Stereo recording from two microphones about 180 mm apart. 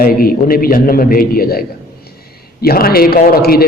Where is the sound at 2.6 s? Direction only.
55° left (ahead or behind).